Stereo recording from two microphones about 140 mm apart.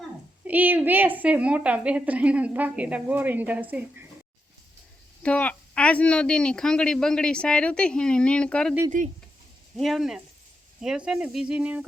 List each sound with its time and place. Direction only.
0.4 s a woman's voice: 10° right (ahead or behind)
5.2 s speech: 10° left (ahead or behind)
8.9 s speech: 70° right (ahead or behind)
9.7 s a woman's voice: centre (ahead or behind)